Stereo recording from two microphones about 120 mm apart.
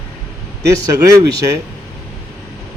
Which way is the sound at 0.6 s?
30° right (ahead or behind).